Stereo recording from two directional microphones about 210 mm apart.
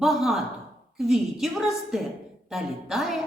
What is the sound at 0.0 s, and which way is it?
Speech, centre (ahead or behind).